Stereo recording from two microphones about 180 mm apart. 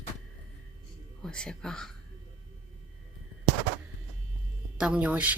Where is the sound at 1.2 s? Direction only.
5° left (ahead or behind).